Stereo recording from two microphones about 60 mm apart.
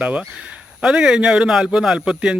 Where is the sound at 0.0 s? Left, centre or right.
Centre.